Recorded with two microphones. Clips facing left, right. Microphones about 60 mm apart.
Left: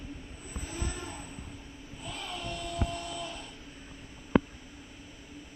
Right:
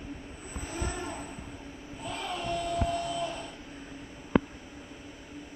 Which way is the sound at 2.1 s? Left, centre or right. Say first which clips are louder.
Right 6 dB; right.